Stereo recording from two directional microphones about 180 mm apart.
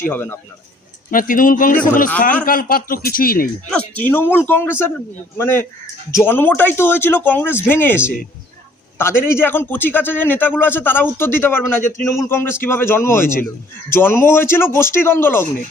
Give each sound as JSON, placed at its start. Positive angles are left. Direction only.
{"t": 0.1, "sound": "a man's voice", "side_deg": 10}
{"t": 1.1, "sound": "a man's voice", "side_deg": 50}
{"t": 3.7, "sound": "a man's voice", "side_deg": 10}